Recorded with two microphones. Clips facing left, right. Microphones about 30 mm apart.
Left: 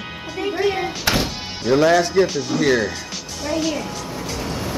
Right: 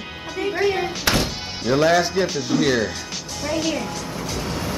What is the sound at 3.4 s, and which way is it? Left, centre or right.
Music, centre.